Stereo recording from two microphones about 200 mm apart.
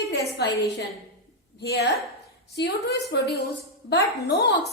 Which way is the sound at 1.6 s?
55° left (ahead or behind).